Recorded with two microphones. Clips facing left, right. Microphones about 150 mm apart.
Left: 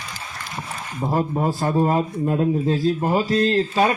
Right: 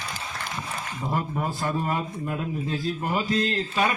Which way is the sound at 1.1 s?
35° left (ahead or behind).